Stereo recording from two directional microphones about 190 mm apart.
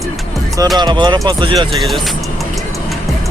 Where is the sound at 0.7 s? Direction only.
25° right (ahead or behind).